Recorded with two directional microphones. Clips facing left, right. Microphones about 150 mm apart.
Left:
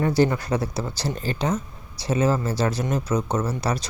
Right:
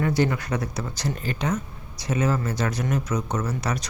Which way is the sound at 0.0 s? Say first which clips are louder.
Left 3 dB; 35° left (ahead or behind).